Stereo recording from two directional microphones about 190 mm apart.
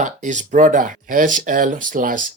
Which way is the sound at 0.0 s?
40° right (ahead or behind).